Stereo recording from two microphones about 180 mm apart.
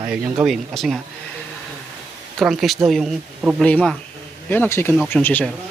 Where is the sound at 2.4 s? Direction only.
Centre (ahead or behind).